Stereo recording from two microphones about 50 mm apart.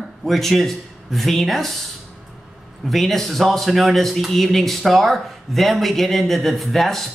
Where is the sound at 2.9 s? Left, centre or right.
Centre.